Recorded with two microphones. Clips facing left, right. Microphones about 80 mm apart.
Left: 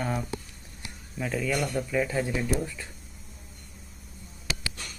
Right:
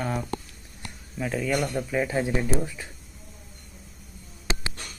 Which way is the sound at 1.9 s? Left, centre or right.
Centre.